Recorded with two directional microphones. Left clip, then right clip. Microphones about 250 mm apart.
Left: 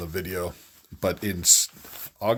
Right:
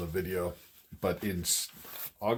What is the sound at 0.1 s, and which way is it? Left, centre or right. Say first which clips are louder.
Speech: left 2 dB; left.